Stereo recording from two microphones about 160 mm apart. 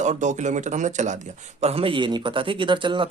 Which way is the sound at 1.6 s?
35° right (ahead or behind).